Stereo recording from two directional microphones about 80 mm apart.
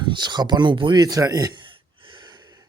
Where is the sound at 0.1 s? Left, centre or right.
Right.